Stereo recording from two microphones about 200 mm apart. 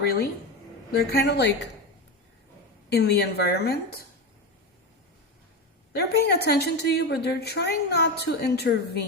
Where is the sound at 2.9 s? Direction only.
55° left (ahead or behind).